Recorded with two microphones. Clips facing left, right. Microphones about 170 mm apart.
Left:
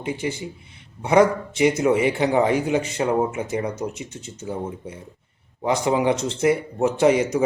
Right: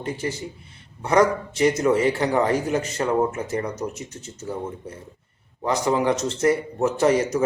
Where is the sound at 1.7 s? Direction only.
20° left (ahead or behind).